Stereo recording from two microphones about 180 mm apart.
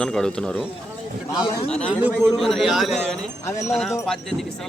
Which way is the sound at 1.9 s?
10° right (ahead or behind).